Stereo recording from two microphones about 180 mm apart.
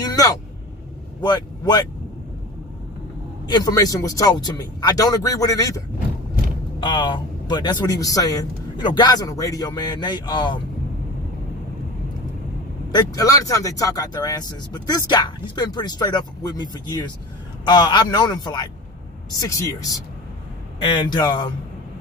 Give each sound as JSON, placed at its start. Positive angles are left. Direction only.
{"t": 0.0, "sound": "vehicle", "side_deg": 20}
{"t": 1.2, "sound": "speech", "side_deg": 25}
{"t": 3.4, "sound": "a man's voice", "side_deg": 20}
{"t": 12.9, "sound": "a man's voice", "side_deg": 20}